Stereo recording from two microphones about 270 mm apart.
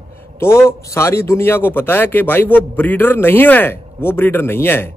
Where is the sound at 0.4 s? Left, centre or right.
Centre.